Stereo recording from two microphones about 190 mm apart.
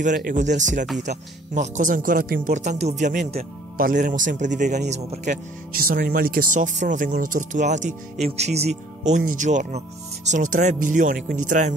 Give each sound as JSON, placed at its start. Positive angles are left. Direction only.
{"t": 0.0, "sound": "a man's voice", "side_deg": -45}